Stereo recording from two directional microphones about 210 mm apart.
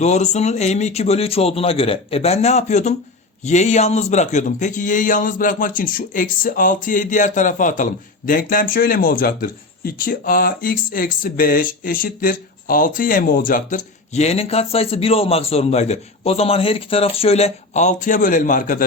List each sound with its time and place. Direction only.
0.0 s speech: 30° left (ahead or behind)